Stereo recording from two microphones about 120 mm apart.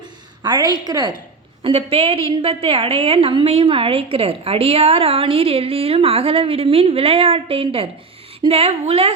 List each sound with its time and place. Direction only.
0.4 s a woman's voice: 35° right (ahead or behind)
1.6 s a woman's voice: 55° right (ahead or behind)